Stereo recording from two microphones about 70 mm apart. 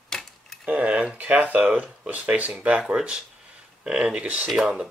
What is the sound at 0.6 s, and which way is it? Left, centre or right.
Speech, right.